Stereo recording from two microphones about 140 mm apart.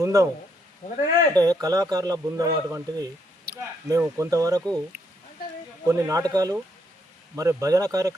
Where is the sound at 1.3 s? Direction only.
25° right (ahead or behind).